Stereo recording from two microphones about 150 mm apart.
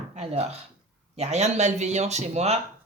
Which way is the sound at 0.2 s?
45° right (ahead or behind).